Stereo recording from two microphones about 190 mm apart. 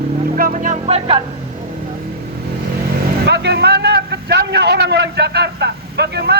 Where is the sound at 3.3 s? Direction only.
60° right (ahead or behind).